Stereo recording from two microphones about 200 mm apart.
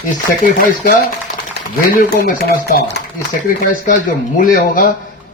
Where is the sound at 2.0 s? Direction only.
45° left (ahead or behind).